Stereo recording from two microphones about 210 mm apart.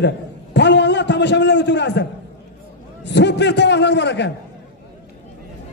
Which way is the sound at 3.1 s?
55° left (ahead or behind).